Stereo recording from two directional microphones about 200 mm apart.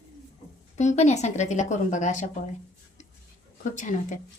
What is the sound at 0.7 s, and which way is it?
Speech, 35° left (ahead or behind).